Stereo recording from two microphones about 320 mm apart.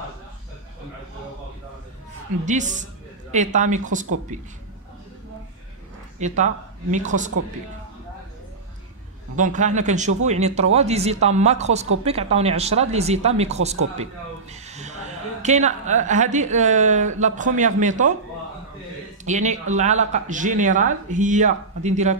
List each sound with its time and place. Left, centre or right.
2.4 s a woman's voice: right
6.1 s speech: right
9.4 s speech: right
14.5 s a sound: right
15.4 s speech: right
19.2 s speech: right